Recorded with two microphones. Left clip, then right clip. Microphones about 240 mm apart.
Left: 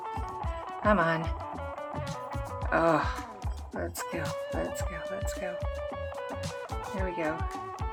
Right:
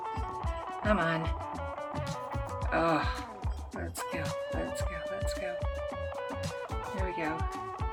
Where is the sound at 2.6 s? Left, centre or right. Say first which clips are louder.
Left 3 dB; centre.